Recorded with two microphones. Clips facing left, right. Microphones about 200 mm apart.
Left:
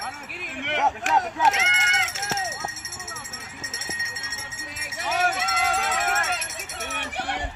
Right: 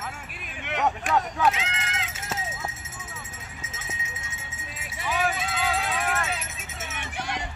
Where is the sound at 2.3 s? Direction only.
90° left.